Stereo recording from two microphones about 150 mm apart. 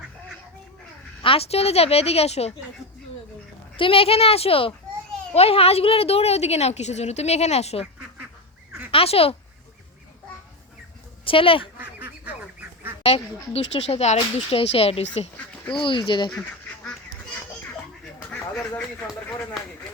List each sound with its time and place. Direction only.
1.2 s a woman's voice: 40° left (ahead or behind)
3.8 s a woman's voice: 35° left (ahead or behind)
8.9 s speech: 40° left (ahead or behind)
11.3 s speech: 35° left (ahead or behind)
11.8 s duck: 10° right (ahead or behind)
13.1 s a woman's voice: 40° left (ahead or behind)
18.3 s speech: 10° left (ahead or behind)